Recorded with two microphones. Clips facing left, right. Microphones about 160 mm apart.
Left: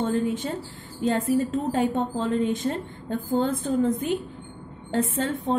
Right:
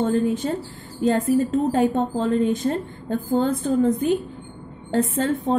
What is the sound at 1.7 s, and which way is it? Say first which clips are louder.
A woman's voice: right 4 dB; 40° right (ahead or behind).